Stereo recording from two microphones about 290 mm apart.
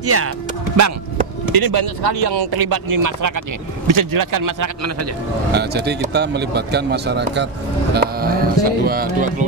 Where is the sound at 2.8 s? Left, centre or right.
Right.